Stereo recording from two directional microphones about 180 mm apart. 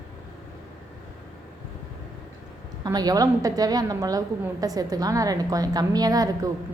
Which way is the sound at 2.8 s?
20° right (ahead or behind).